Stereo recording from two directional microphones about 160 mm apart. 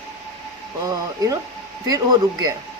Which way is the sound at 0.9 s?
20° right (ahead or behind).